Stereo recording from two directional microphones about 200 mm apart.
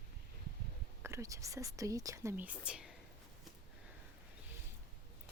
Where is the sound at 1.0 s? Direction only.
15° right (ahead or behind).